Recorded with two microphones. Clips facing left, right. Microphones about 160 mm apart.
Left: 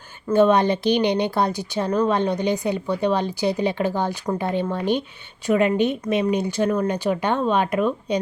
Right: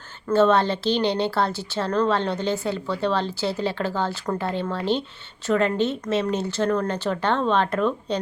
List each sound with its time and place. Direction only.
0.3 s speech: 15° left (ahead or behind)